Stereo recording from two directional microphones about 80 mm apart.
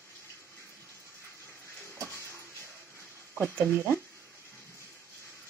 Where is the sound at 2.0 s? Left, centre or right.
Right.